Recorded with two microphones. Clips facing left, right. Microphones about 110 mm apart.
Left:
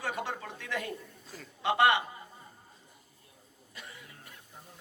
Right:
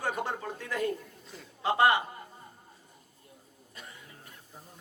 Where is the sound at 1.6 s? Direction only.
35° right (ahead or behind).